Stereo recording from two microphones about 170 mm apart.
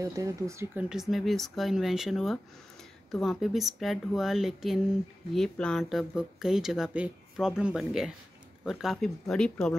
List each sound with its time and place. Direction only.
0.0 s speech: 20° right (ahead or behind)
0.8 s speech: centre (ahead or behind)